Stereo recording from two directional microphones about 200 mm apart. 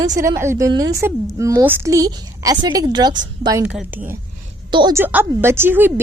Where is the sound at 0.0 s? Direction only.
15° right (ahead or behind).